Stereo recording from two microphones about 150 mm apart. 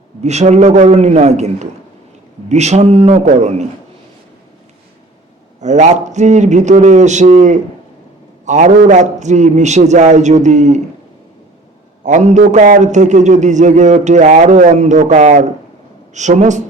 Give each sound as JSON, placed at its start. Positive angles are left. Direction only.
{"t": 0.2, "sound": "speech", "side_deg": -50}
{"t": 5.5, "sound": "speech", "side_deg": -50}
{"t": 12.0, "sound": "speech", "side_deg": -50}